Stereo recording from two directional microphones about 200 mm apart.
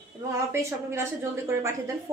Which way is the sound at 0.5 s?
15° right (ahead or behind).